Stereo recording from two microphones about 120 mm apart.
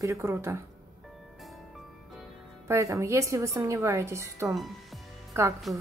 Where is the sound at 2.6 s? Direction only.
25° right (ahead or behind).